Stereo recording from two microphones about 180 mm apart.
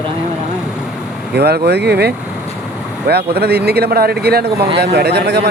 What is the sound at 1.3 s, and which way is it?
Speech, 65° right (ahead or behind).